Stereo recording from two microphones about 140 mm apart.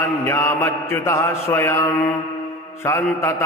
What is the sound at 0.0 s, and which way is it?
Mantra, 20° left (ahead or behind).